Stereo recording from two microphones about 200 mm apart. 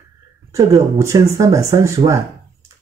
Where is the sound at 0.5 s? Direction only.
15° right (ahead or behind).